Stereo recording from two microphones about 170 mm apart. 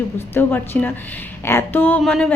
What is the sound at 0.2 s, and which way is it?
A woman's voice, 15° left (ahead or behind).